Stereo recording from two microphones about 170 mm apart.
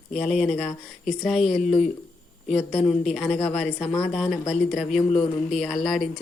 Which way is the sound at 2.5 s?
40° left (ahead or behind).